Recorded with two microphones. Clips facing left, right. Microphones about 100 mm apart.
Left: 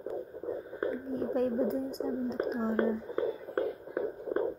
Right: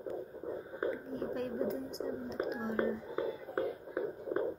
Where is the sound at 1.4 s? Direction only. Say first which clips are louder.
Left 8 dB; 40° left (ahead or behind).